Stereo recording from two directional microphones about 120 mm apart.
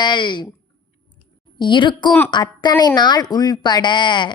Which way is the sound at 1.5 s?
40° left (ahead or behind).